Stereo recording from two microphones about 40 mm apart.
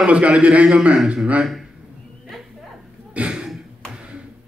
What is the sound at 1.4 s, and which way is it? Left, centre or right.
Speech, centre.